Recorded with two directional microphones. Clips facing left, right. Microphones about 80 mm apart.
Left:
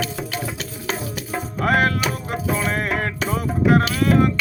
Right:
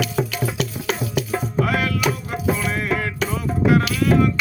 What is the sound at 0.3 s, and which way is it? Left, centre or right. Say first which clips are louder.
Music: right 4 dB; left.